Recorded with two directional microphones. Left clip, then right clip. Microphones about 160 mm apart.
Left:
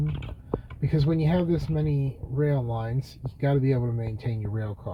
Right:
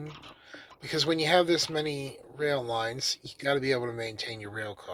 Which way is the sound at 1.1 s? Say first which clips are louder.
Right 4 dB; 35° right (ahead or behind).